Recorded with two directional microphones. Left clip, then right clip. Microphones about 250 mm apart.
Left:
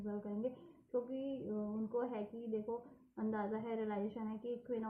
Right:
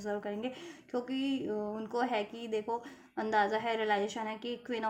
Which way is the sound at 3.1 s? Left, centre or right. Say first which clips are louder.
Right 12 dB; right.